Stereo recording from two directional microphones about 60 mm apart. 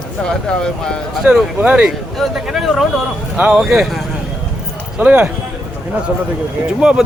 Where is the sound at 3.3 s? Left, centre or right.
Right.